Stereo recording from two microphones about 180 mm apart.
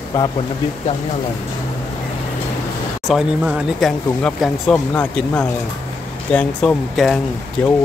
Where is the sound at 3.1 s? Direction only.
Centre (ahead or behind).